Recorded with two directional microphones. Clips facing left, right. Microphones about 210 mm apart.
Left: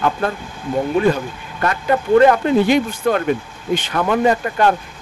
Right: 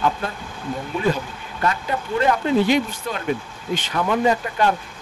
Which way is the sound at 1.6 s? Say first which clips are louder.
Left 5 dB; 60° left (ahead or behind).